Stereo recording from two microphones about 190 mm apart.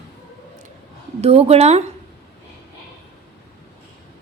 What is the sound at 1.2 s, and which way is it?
Speech, 30° right (ahead or behind).